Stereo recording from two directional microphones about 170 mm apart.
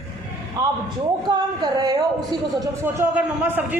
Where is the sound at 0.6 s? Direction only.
20° right (ahead or behind).